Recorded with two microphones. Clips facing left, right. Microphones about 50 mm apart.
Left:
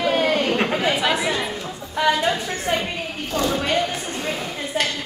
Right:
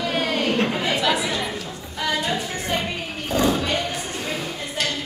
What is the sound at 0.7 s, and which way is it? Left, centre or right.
Speech, centre.